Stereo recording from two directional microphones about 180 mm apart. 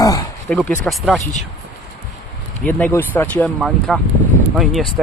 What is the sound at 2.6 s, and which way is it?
Speech, 5° left (ahead or behind).